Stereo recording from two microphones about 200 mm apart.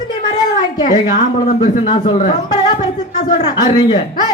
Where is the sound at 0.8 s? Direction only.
35° left (ahead or behind).